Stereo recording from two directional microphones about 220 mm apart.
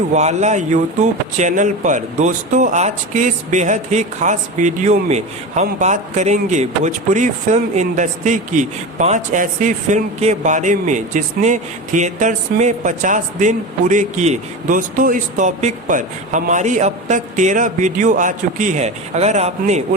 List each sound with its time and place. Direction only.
0.1 s speech: 30° right (ahead or behind)